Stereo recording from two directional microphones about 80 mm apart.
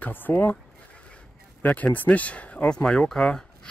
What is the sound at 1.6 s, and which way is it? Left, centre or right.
Speech, centre.